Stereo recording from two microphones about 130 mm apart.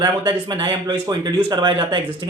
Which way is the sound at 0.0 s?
35° right (ahead or behind).